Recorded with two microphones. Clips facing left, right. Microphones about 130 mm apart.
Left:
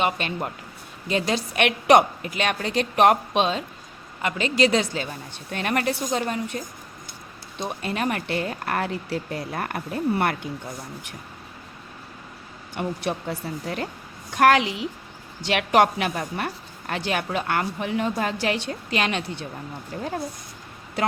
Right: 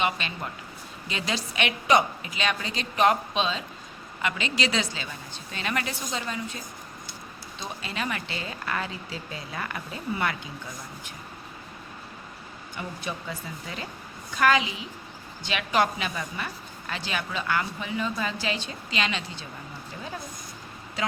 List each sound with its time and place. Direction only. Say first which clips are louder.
0.0 s a woman's voice: left 4 dB; 50° left (ahead or behind)
4.2 s a woman's voice: left 7 dB; 45° left (ahead or behind)
7.6 s a woman's voice: left 7 dB; 55° left (ahead or behind)
12.7 s a woman's voice: left 8 dB; 65° left (ahead or behind)